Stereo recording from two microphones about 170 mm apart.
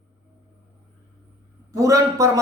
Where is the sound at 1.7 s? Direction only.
20° right (ahead or behind).